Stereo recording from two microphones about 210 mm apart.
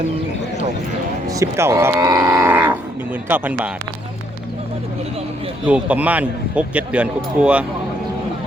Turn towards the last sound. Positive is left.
turn(degrees=-5)  # may be behind; listen again after turning